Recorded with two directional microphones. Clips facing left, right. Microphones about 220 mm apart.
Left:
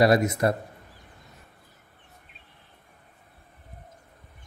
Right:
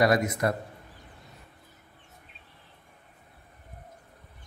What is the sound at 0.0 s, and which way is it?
Speech, 30° left (ahead or behind).